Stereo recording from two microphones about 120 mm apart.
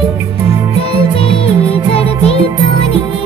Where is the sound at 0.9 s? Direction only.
50° left (ahead or behind).